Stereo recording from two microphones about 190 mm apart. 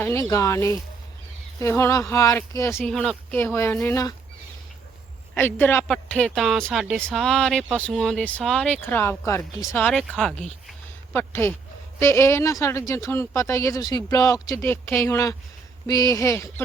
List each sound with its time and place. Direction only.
0.0 s speech: 15° left (ahead or behind)
2.9 s a woman's voice: centre (ahead or behind)
3.3 s speech: 15° left (ahead or behind)
5.3 s a woman's voice: 10° left (ahead or behind)